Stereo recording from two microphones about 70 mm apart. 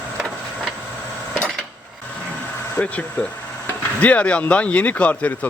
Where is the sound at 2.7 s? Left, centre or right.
Left.